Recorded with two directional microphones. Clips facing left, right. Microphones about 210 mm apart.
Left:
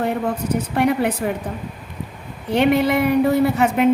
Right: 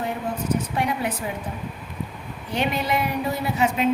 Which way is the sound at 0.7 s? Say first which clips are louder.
Left 7 dB; 60° left (ahead or behind).